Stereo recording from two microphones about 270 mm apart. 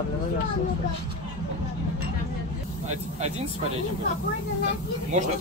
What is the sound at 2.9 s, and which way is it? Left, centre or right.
Speech, right.